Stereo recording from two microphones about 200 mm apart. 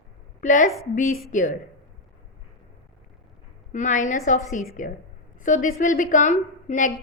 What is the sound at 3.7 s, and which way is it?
A woman's voice, 40° left (ahead or behind).